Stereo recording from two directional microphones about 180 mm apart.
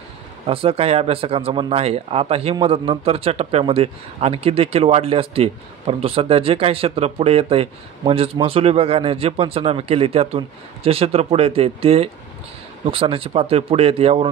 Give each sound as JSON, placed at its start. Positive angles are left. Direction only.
{"t": 0.5, "sound": "a man's voice", "side_deg": -30}